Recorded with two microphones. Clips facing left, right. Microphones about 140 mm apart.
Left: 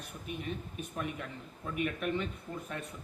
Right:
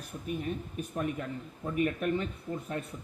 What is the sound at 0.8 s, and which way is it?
Speech, 35° right (ahead or behind).